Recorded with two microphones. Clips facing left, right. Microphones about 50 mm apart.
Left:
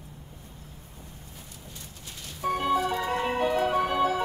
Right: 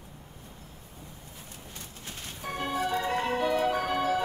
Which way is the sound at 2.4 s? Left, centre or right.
Left.